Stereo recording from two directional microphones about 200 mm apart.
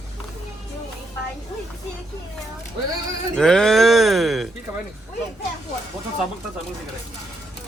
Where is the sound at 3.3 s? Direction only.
5° left (ahead or behind).